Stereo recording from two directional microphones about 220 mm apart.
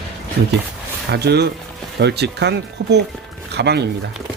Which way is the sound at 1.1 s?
50° right (ahead or behind).